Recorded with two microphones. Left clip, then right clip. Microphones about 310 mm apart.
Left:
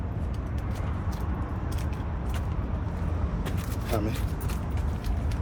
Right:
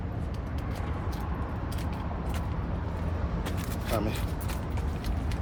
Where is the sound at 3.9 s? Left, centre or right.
Right.